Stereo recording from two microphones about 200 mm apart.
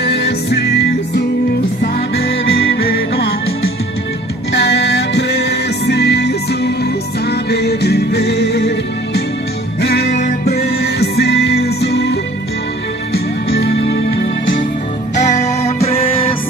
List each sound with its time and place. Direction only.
0.0 s music: 55° left (ahead or behind)
4.5 s music: 55° left (ahead or behind)
13.5 s music: 55° left (ahead or behind)
15.1 s music: 35° left (ahead or behind)